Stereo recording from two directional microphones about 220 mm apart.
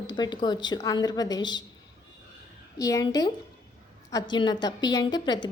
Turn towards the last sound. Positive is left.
turn(degrees=20)  # may be behind; listen again after turning